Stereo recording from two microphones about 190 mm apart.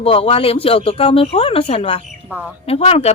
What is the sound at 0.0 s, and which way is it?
Speech, 30° left (ahead or behind).